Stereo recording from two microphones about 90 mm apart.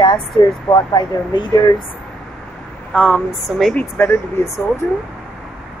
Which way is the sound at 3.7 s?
25° left (ahead or behind).